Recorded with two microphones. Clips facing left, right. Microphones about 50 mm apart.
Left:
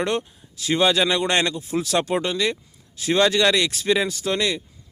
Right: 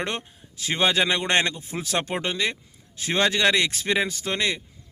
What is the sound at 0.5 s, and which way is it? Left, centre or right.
Speech, right.